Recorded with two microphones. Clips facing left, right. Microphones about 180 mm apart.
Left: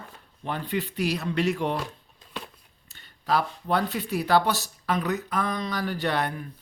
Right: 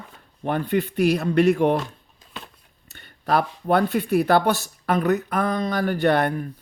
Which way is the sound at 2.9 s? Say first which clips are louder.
Right 4 dB; 60° right (ahead or behind).